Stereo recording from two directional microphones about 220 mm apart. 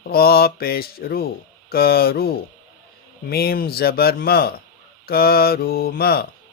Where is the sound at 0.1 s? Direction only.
45° left (ahead or behind).